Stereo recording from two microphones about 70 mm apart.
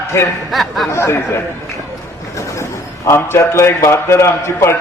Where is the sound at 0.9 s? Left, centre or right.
Left.